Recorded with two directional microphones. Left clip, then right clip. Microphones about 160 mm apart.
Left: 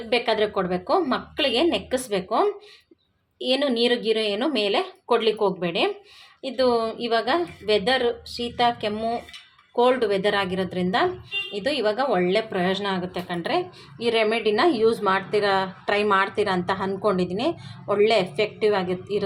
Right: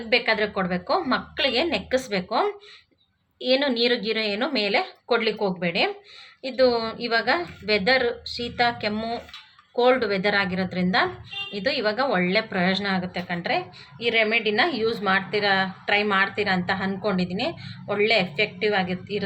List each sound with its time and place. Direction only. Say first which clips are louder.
0.1 s a woman's voice: even; 20° left (ahead or behind)
3.4 s a woman's voice: even; 15° left (ahead or behind)